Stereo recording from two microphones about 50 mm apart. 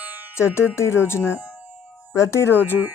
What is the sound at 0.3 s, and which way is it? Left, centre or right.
Speech, left.